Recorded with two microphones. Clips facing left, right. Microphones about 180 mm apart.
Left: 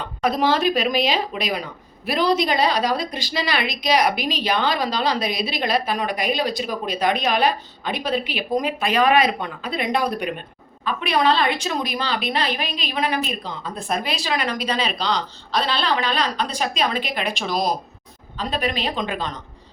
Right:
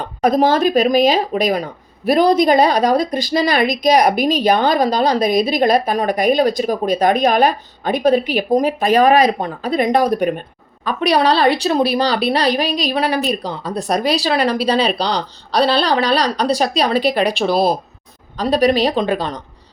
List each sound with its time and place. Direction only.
0.0 s speech: 40° right (ahead or behind)